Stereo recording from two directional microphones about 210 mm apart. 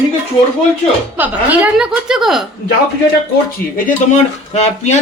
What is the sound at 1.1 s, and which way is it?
A woman's voice, 10° right (ahead or behind).